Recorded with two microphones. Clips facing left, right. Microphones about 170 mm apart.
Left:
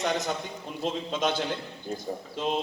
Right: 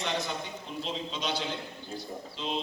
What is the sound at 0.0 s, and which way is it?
A man's voice, 45° left (ahead or behind).